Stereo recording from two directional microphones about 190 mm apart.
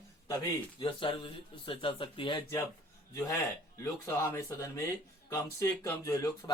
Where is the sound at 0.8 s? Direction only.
25° left (ahead or behind).